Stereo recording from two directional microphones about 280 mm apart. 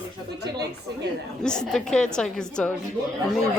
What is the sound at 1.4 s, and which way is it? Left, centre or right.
Speech, centre.